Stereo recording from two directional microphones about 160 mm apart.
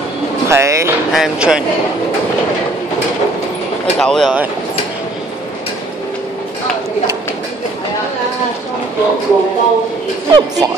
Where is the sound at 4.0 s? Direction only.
5° left (ahead or behind).